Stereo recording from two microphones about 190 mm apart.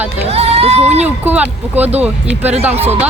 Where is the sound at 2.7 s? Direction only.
35° right (ahead or behind).